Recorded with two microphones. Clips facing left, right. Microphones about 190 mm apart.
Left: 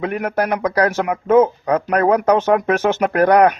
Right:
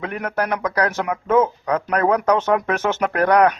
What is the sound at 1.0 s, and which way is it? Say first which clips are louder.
Speech: left 5 dB; 20° left (ahead or behind).